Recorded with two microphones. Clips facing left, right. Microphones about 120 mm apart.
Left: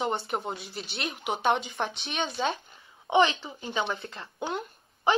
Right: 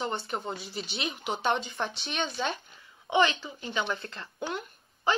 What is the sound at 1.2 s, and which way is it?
A woman's voice, 10° left (ahead or behind).